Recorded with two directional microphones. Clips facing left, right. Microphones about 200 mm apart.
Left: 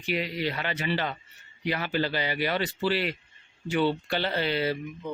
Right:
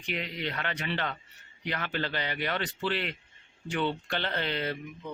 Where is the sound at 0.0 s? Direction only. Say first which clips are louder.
Left 5 dB; 5° left (ahead or behind).